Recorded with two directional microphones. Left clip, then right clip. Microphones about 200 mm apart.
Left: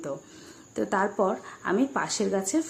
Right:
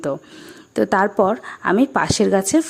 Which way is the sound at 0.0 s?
45° right (ahead or behind).